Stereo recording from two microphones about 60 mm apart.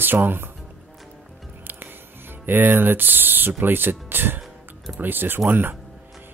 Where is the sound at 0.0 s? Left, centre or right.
Right.